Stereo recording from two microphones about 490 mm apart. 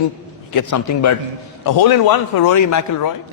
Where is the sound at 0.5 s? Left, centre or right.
Left.